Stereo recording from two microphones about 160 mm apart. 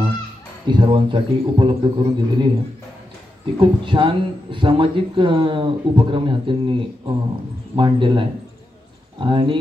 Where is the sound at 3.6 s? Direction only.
30° right (ahead or behind).